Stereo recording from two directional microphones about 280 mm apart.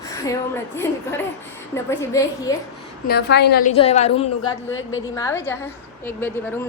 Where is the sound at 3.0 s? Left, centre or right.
Left.